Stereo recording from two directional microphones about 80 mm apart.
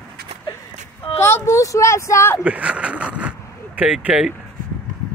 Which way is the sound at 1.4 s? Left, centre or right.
Left.